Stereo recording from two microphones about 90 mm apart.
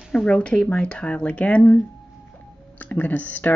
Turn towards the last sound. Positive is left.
turn(degrees=20)  # may be behind; listen again after turning